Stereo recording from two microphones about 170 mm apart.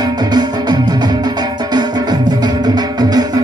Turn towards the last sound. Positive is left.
turn(degrees=-25)  # may be behind; listen again after turning